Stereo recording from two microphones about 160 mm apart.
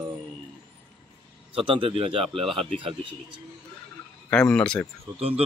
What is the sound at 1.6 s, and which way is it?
A man's voice, 35° right (ahead or behind).